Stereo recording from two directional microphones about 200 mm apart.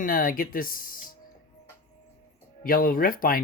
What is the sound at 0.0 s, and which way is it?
Speech, 45° left (ahead or behind).